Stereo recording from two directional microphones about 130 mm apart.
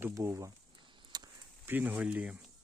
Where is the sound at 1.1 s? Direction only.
35° right (ahead or behind).